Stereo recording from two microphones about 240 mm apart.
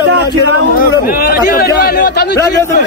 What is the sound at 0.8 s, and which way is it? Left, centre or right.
A man's voice, left.